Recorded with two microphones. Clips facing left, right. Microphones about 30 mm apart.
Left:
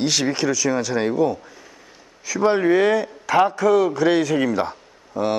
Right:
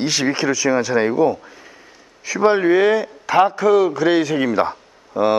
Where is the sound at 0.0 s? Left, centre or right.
Right.